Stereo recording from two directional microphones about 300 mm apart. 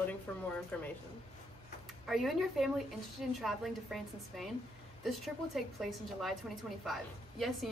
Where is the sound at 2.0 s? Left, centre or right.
Centre.